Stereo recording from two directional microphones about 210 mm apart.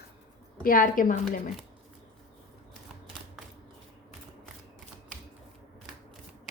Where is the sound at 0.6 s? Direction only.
40° left (ahead or behind).